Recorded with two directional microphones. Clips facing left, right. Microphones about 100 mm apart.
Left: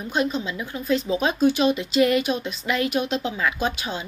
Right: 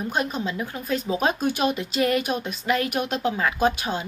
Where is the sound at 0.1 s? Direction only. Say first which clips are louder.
Left 5 dB; 45° right (ahead or behind).